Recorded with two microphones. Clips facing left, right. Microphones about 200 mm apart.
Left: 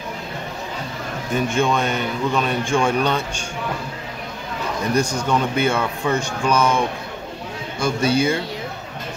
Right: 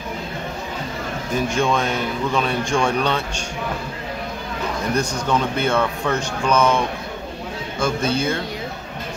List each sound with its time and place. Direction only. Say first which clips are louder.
1.3 s speech: left 1 dB; 5° left (ahead or behind)
4.9 s speech: left 2 dB; 10° left (ahead or behind)
7.8 s speech: left 2 dB; 10° left (ahead or behind)